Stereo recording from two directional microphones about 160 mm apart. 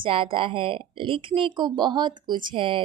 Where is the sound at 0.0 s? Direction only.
35° right (ahead or behind).